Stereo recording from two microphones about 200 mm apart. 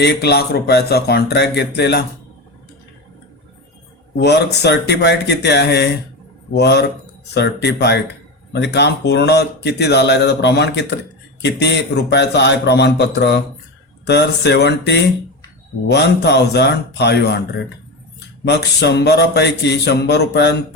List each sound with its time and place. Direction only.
0.0 s speech: 55° left (ahead or behind)
4.2 s speech: 55° left (ahead or behind)
18.4 s speech: 55° left (ahead or behind)